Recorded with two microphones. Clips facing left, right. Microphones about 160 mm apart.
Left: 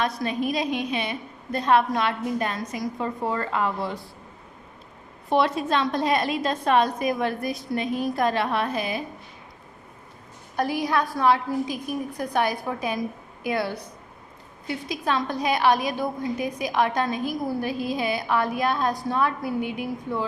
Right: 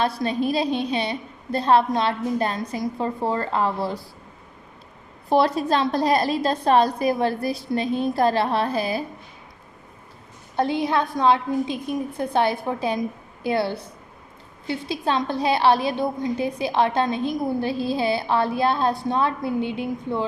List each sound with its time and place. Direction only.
0.0 s a woman's voice: 30° right (ahead or behind)
5.3 s a woman's voice: 35° right (ahead or behind)
10.6 s a woman's voice: 25° right (ahead or behind)